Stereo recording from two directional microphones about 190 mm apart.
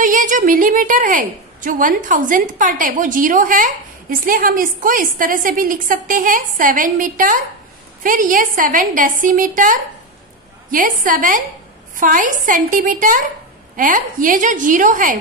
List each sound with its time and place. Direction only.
0.0 s a woman's voice: 45° right (ahead or behind)